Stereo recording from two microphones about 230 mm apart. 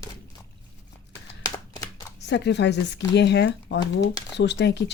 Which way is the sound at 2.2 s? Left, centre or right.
Left.